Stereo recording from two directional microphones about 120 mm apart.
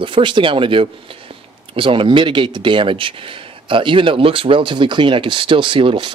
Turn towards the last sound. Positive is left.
turn(degrees=-45)  # may be behind; listen again after turning